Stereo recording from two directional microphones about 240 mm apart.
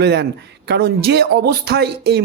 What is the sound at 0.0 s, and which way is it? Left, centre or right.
Speech, right.